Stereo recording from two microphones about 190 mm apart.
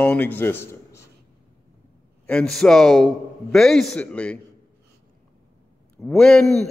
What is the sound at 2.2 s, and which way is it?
A man's voice, 5° left (ahead or behind).